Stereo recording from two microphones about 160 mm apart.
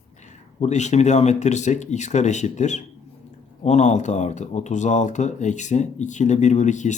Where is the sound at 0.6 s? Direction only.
45° left (ahead or behind).